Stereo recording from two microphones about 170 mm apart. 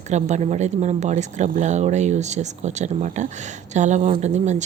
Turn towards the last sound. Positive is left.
turn(degrees=-45)  # may be behind; listen again after turning